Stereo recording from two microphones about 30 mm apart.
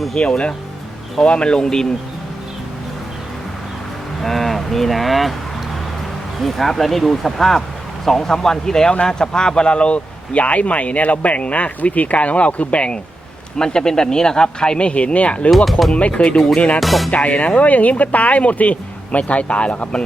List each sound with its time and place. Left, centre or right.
0.2 s speech: left
4.2 s speech: centre
6.4 s speech: centre; by 13.0 s left
13.6 s speech: left
15.4 s speech: centre
16.0 s speech: left
16.8 s speech: centre
17.2 s speech: left